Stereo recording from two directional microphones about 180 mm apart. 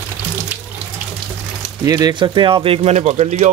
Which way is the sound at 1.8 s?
20° right (ahead or behind).